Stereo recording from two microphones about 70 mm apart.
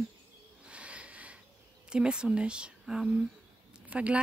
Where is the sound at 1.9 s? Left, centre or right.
Centre.